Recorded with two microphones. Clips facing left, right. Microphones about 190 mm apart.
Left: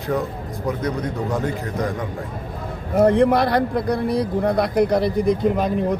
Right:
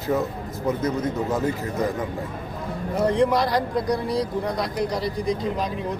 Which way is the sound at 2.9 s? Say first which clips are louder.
Left 5 dB; 60° left (ahead or behind).